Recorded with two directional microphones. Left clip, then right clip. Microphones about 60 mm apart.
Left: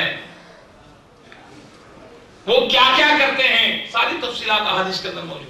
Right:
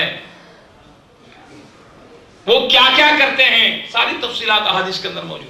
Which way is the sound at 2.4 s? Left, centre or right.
Right.